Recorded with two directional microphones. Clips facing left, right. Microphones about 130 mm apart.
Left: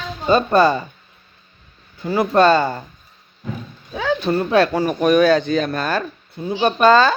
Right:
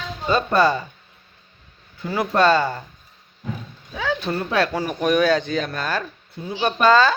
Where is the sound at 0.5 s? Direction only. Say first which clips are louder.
Left 1 dB; 45° left (ahead or behind).